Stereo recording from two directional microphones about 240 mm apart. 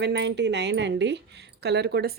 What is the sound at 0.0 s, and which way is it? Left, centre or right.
Speech, right.